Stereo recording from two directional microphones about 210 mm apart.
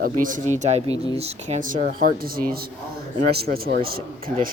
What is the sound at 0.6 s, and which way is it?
A man's voice, 30° right (ahead or behind).